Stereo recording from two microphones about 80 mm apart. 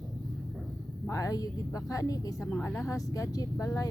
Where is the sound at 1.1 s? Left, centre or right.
Left.